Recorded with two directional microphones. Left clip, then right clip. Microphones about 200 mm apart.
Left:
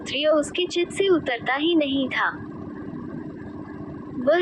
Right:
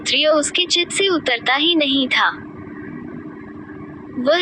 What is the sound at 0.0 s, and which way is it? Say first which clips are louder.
A woman's voice: right 5 dB; 25° right (ahead or behind).